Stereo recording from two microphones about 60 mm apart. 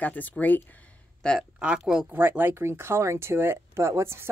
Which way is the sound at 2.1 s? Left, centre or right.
Right.